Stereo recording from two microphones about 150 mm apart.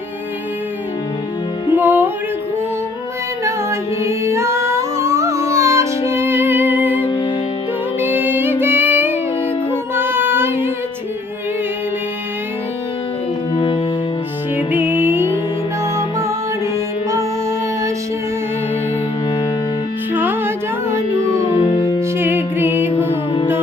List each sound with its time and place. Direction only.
1.7 s music: 15° right (ahead or behind)
3.4 s singing: 20° right (ahead or behind)
7.0 s music: 30° left (ahead or behind)
7.9 s music: 15° right (ahead or behind)
9.9 s singing: 15° right (ahead or behind)
13.5 s music: 35° left (ahead or behind)
14.5 s music: 10° right (ahead or behind)
20.1 s music: 15° right (ahead or behind)
21.6 s music: 30° left (ahead or behind)
22.2 s music: 15° right (ahead or behind)